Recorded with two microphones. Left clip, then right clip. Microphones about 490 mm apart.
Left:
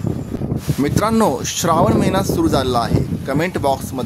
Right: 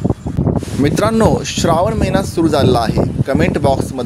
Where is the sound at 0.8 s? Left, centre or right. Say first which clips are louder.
Right 3 dB; left.